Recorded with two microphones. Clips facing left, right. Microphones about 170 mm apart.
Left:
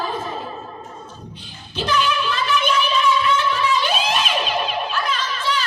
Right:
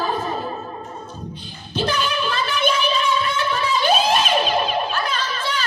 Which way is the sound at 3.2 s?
40° right (ahead or behind).